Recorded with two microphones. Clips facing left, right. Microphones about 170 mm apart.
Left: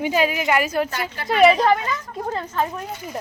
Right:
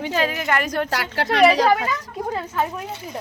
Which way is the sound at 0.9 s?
75° right (ahead or behind).